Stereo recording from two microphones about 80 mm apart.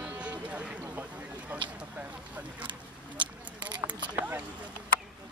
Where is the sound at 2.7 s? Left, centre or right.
Right.